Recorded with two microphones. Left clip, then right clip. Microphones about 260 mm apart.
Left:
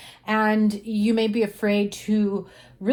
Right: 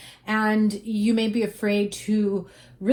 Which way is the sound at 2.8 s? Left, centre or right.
Left.